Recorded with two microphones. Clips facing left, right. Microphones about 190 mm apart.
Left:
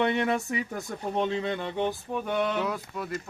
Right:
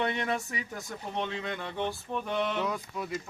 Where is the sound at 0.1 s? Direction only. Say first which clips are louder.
Left 5 dB; 55° left (ahead or behind).